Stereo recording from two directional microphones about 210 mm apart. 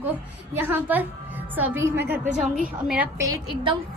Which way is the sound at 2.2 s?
35° right (ahead or behind).